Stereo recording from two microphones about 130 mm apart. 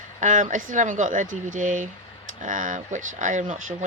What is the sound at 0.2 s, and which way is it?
Speech, 75° right (ahead or behind).